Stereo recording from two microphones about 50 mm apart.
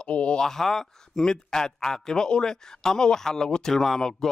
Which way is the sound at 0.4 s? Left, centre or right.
Centre.